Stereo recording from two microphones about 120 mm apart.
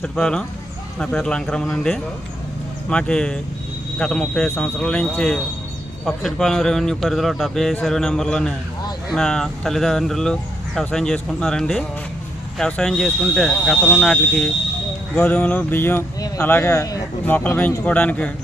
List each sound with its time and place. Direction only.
0.0 s speech: 5° left (ahead or behind)
4.4 s speech: 20° left (ahead or behind)
4.8 s speech: 10° left (ahead or behind); by 17.0 s 25° left (ahead or behind)
17.2 s speech: 15° left (ahead or behind)